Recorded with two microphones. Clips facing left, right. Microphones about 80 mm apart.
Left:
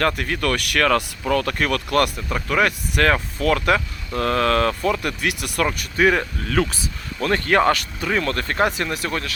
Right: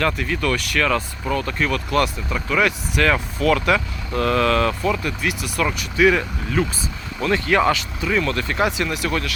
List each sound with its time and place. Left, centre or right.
0.0 s speech: left
1.3 s speech: left
4.9 s speech: left
5.6 s speech: left
6.5 s speech: left
7.3 s speech: left